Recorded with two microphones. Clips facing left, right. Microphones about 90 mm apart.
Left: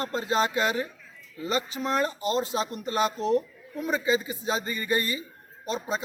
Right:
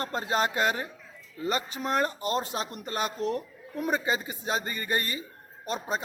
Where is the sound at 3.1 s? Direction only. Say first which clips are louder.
Left 5 dB; 25° left (ahead or behind).